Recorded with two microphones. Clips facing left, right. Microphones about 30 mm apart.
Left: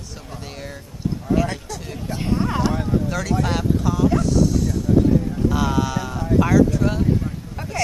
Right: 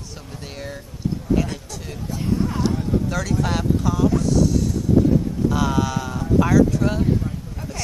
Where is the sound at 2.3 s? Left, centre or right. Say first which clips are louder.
Left 1 dB; left.